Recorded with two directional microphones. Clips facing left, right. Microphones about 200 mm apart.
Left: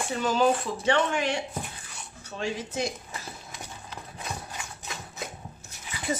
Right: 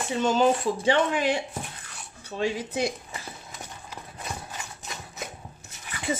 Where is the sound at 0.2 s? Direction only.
25° right (ahead or behind).